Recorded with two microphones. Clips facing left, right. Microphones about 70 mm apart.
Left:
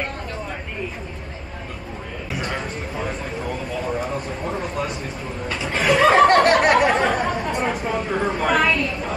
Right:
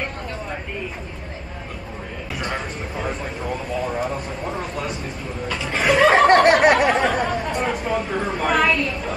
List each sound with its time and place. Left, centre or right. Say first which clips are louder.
2.3 s a sound: even; centre
5.6 s snicker: right 1 dB; centre
6.9 s chatter: even; centre